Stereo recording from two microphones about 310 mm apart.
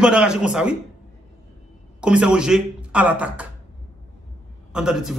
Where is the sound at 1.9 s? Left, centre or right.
Centre.